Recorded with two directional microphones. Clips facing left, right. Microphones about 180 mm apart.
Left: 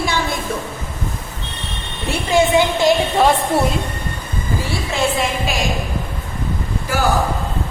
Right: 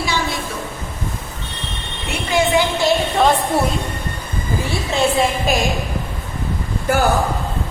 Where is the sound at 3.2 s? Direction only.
Centre (ahead or behind).